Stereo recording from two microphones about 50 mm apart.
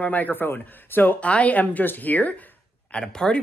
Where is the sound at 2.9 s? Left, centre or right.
Centre.